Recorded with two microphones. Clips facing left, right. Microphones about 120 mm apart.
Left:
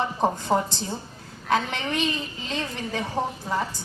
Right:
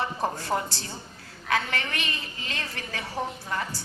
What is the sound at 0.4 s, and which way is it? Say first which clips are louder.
A woman's voice: left 5 dB; 20° left (ahead or behind).